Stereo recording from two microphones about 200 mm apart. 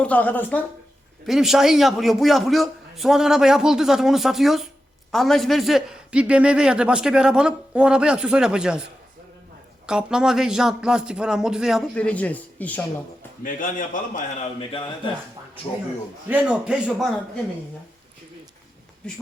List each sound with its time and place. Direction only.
0.0 s a woman's voice: 10° left (ahead or behind)
1.3 s a man's voice: centre (ahead or behind)
9.8 s a man's voice: 5° right (ahead or behind)
13.4 s a man's voice: 40° left (ahead or behind); by 15.1 s 25° left (ahead or behind)
16.3 s a man's voice: 5° right (ahead or behind)